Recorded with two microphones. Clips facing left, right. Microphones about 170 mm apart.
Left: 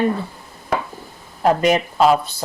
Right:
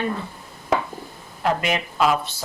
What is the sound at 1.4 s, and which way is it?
Speech, 40° left (ahead or behind).